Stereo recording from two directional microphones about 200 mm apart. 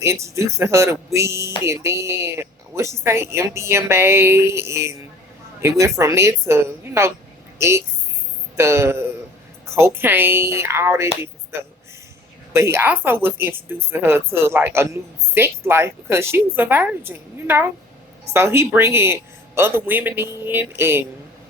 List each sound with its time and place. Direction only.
0.0 s speech: 15° right (ahead or behind)
8.5 s speech: 15° right (ahead or behind)